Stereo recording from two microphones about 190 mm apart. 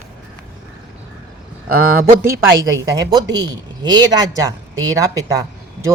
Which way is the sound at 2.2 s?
15° right (ahead or behind).